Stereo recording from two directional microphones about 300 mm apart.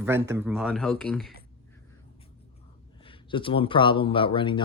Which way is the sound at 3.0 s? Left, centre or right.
Centre.